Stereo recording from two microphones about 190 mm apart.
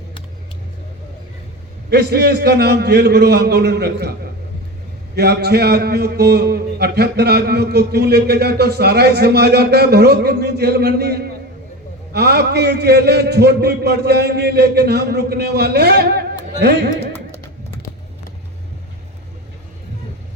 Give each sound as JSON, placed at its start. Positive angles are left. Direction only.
{"t": 1.9, "sound": "a man's voice", "side_deg": -60}
{"t": 5.1, "sound": "a man's voice", "side_deg": -60}